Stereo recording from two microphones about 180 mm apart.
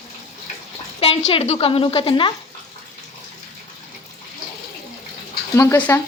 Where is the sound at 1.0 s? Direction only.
35° left (ahead or behind).